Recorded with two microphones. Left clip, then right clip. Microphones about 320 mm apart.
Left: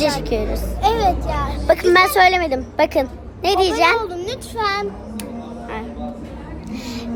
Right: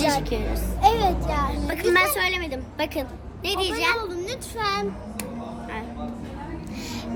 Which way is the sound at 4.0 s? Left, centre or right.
Centre.